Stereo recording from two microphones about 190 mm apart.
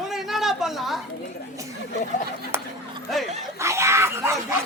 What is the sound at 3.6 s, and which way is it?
Screaming, 15° right (ahead or behind).